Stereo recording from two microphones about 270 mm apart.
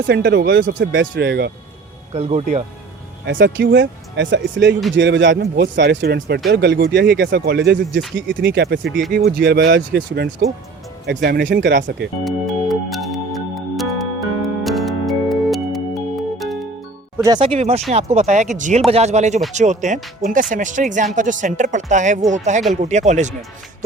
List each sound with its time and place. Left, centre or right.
0.1 s speech: right
2.1 s speech: right
3.2 s speech: right
8.9 s speech: centre
9.1 s speech: right
12.2 s music: centre
17.2 s speech: centre